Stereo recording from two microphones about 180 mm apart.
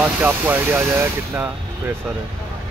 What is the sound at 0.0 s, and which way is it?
Speech, 10° right (ahead or behind).